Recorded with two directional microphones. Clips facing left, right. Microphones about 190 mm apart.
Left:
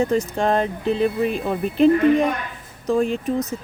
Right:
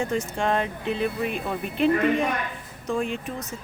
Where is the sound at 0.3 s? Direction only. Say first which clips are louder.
Left 5 dB; 35° left (ahead or behind).